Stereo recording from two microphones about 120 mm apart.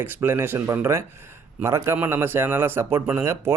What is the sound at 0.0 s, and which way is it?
A man's voice, 15° right (ahead or behind).